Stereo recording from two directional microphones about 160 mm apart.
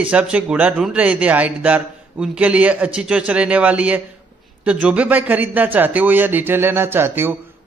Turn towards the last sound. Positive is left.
turn(degrees=-15)  # may be behind; listen again after turning